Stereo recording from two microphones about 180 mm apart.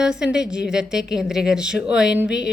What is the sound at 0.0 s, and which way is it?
Speech, 5° right (ahead or behind).